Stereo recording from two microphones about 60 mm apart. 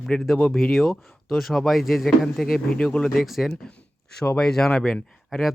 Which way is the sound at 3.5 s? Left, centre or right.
Centre.